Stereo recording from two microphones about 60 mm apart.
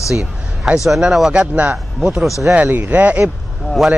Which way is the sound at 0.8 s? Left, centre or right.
Centre.